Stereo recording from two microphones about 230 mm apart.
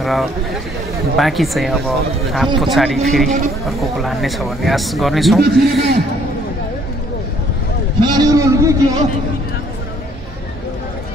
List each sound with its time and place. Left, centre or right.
0.0 s a man's voice: centre
8.0 s a man's voice: centre